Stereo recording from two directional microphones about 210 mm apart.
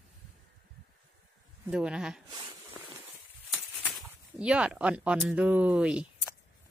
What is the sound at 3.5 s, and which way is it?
Speech, centre (ahead or behind).